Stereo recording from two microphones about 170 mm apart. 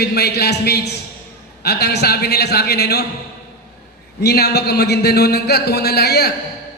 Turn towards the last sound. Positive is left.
turn(degrees=70)  # may be behind; listen again after turning